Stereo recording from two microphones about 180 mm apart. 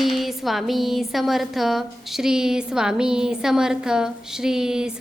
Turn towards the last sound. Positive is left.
turn(degrees=-5)  # may be behind; listen again after turning